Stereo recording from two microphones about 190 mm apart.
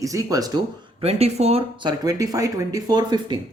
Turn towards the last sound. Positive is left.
turn(degrees=-20)  # may be behind; listen again after turning